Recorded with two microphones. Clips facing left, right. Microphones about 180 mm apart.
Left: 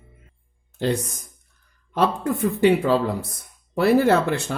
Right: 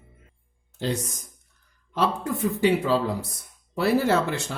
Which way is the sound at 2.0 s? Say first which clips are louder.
Left 4 dB; 55° left (ahead or behind).